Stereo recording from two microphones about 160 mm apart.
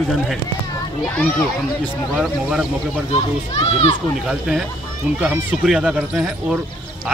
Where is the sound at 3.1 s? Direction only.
35° left (ahead or behind).